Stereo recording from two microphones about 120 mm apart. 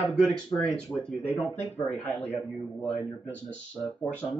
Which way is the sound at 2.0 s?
15° left (ahead or behind).